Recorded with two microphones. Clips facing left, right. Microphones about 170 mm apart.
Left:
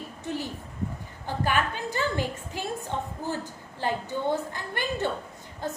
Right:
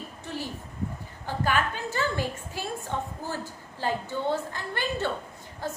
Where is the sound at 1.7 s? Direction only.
15° left (ahead or behind).